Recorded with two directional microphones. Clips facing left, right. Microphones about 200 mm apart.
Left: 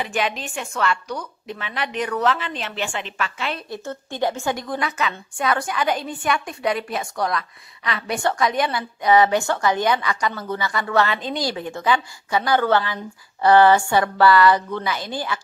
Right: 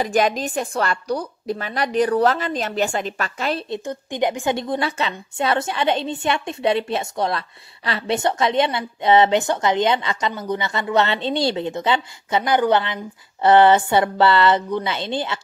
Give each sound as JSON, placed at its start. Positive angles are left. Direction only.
{"t": 0.0, "sound": "a woman's voice", "side_deg": -40}
{"t": 3.7, "sound": "a woman's voice", "side_deg": -15}